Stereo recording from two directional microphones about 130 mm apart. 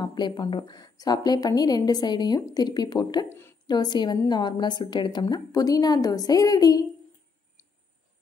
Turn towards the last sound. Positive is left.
turn(degrees=30)  # may be behind; listen again after turning